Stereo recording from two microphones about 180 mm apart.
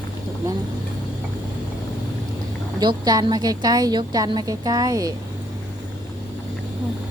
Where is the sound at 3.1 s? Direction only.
20° right (ahead or behind).